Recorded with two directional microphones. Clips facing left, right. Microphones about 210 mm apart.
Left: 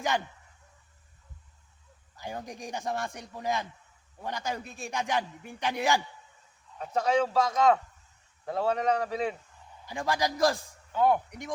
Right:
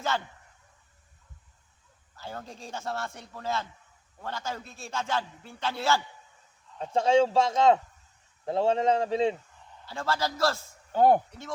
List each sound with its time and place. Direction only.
2.1 s a man's voice: 15° left (ahead or behind)
6.7 s speech: 30° right (ahead or behind)
9.8 s a man's voice: 15° left (ahead or behind)
10.9 s speech: 40° right (ahead or behind)
11.3 s a man's voice: 15° left (ahead or behind)